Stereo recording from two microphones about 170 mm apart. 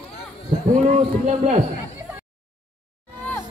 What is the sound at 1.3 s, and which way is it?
Speech, 45° right (ahead or behind).